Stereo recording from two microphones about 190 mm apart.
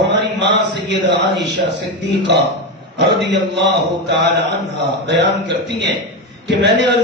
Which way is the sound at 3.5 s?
65° right (ahead or behind).